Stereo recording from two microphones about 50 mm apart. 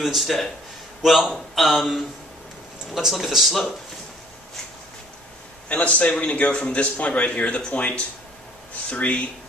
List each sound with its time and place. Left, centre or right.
0.0 s a man's voice: centre
5.7 s speech: left